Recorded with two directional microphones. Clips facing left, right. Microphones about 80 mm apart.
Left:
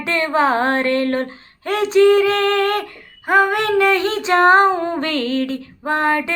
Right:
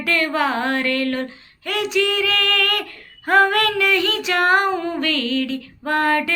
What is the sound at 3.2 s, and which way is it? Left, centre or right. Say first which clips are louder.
Female singing: even; centre.